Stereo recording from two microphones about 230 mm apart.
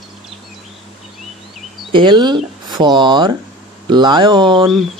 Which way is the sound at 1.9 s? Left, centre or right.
Right.